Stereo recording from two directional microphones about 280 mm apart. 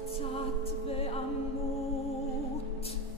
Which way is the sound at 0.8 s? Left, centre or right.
Left.